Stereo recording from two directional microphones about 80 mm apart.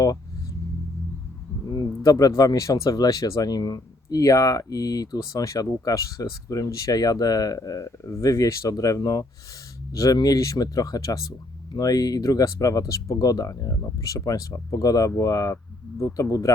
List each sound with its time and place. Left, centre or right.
2.0 s speech: left